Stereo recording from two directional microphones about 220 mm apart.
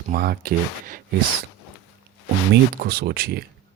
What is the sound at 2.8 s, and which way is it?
Speech, 45° right (ahead or behind).